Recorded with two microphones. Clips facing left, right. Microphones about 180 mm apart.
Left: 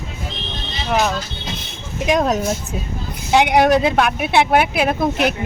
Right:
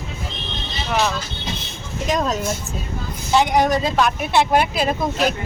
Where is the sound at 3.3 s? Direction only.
70° left (ahead or behind).